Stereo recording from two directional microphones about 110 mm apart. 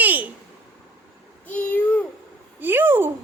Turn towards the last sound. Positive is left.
turn(degrees=-20)  # may be behind; listen again after turning